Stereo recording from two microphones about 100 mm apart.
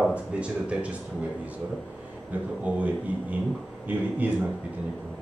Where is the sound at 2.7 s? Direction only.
15° right (ahead or behind).